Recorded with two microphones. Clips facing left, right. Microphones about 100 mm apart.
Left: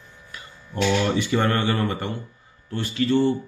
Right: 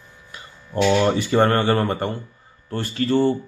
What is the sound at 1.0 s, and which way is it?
Speech, 40° right (ahead or behind).